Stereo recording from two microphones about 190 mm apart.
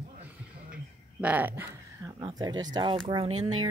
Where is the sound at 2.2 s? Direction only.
20° right (ahead or behind).